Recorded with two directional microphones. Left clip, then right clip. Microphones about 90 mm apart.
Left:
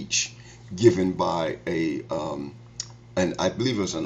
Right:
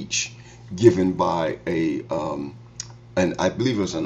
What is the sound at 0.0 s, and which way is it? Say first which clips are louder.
Speech: even; 15° left (ahead or behind).